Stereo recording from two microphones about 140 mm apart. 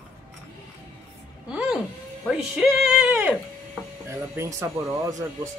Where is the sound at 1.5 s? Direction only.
5° right (ahead or behind).